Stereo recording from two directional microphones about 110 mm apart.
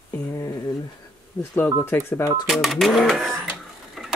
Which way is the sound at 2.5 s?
Centre (ahead or behind).